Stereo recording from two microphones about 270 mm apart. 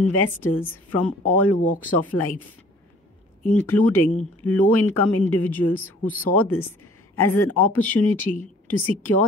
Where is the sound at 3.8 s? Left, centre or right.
Left.